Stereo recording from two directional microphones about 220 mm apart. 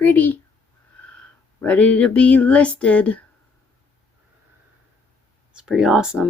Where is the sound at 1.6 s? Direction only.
5° left (ahead or behind).